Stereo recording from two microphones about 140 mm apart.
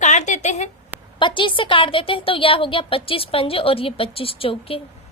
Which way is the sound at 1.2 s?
35° left (ahead or behind).